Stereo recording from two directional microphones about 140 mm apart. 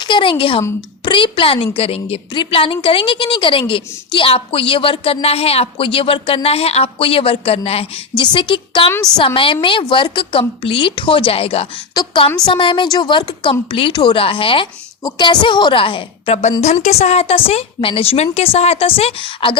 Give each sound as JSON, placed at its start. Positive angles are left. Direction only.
{"t": 0.0, "sound": "a woman's voice", "side_deg": 35}